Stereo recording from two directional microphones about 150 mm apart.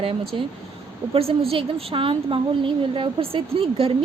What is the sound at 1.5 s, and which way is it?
A woman's voice, 40° right (ahead or behind).